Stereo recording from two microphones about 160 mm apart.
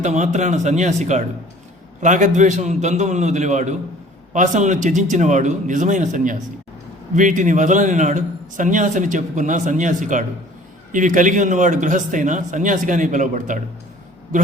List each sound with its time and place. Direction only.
0.0 s a man's voice: 50° right (ahead or behind)